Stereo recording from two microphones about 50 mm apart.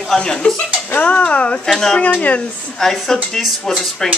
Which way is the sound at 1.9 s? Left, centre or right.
Left.